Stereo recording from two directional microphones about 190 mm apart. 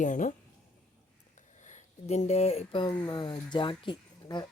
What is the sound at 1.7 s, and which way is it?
Speech, 40° left (ahead or behind).